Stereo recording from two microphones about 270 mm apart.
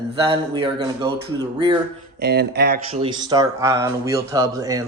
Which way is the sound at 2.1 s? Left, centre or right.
Right.